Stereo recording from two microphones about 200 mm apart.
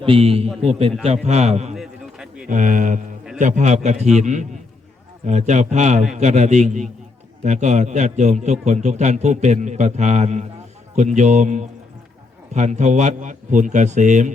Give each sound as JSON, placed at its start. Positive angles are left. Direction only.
{"t": 0.0, "sound": "a man's voice", "side_deg": -30}
{"t": 0.4, "sound": "a man's voice", "side_deg": 0}
{"t": 0.7, "sound": "a man's voice", "side_deg": -30}
{"t": 1.7, "sound": "a sound", "side_deg": 0}
{"t": 2.5, "sound": "a man's voice", "side_deg": -40}